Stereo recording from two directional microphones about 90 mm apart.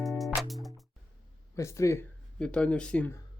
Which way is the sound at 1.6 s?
35° left (ahead or behind).